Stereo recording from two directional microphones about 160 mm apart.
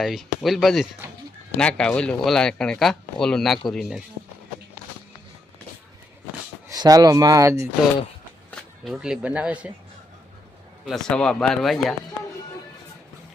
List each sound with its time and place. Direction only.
0.0 s speech: centre (ahead or behind)
6.7 s speech: 25° right (ahead or behind)
8.4 s speech: centre (ahead or behind)
10.8 s speech: 5° left (ahead or behind)